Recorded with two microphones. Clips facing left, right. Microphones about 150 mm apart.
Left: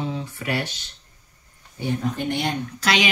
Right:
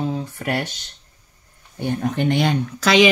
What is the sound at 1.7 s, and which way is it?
Speech, 60° right (ahead or behind).